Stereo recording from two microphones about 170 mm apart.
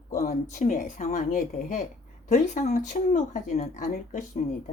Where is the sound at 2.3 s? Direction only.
45° left (ahead or behind).